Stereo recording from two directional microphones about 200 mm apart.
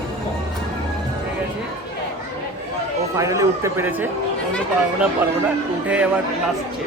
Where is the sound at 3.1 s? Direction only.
15° right (ahead or behind).